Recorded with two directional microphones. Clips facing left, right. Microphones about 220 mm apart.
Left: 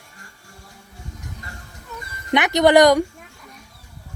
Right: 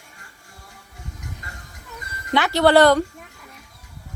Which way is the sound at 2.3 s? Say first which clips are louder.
Left 1 dB; 20° left (ahead or behind).